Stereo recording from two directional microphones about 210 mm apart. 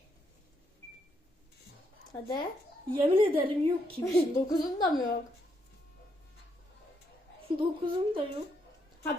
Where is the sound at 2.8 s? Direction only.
25° right (ahead or behind).